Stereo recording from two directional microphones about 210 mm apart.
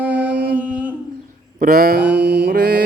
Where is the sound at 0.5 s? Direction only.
10° right (ahead or behind).